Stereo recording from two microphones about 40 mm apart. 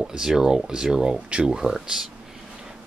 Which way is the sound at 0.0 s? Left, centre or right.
Centre.